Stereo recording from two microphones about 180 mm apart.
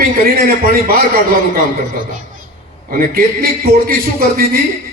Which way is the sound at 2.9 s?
55° right (ahead or behind).